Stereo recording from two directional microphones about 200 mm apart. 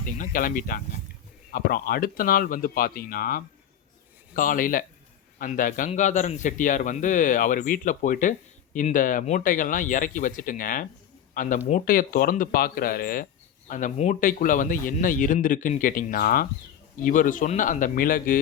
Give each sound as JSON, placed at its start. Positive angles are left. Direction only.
{"t": 0.0, "sound": "a man's voice", "side_deg": 40}